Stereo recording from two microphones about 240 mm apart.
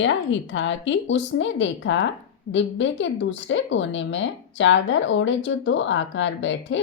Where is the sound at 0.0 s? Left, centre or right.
Left.